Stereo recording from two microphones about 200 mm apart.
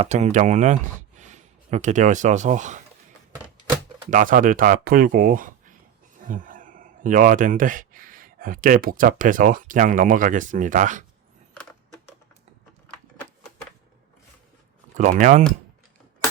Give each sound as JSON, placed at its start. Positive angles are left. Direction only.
{"t": 0.0, "sound": "speech", "side_deg": -35}
{"t": 4.1, "sound": "speech", "side_deg": -40}
{"t": 14.9, "sound": "speech", "side_deg": -40}